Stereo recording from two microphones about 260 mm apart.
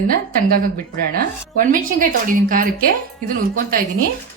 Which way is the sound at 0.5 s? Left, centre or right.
Right.